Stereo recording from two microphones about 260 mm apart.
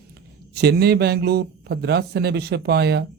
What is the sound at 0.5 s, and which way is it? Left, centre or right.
A man's voice, right.